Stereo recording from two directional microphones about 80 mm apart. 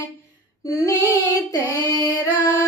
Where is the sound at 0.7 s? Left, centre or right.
Left.